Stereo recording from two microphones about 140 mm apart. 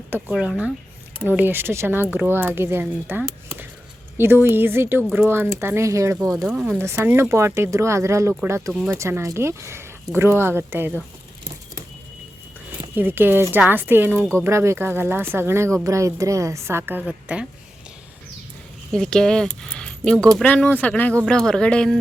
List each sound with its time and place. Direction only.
0.3 s speech: 5° right (ahead or behind)
6.6 s speech: 10° right (ahead or behind)
13.0 s speech: 15° right (ahead or behind)
18.9 s speech: 5° left (ahead or behind)